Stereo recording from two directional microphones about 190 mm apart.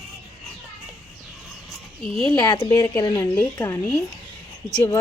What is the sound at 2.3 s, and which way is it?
A woman's voice, 20° left (ahead or behind).